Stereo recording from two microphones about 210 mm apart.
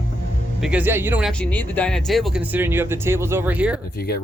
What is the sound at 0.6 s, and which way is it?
Speech, 5° right (ahead or behind).